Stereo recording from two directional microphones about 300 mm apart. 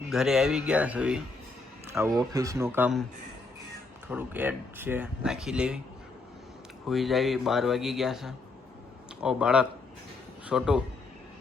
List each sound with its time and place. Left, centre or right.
0.1 s speech: centre
4.1 s speech: centre
6.8 s speech: centre